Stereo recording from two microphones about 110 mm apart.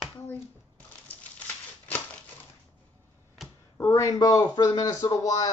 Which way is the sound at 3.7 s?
25° left (ahead or behind).